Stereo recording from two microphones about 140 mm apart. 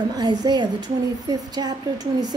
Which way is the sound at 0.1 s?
30° right (ahead or behind).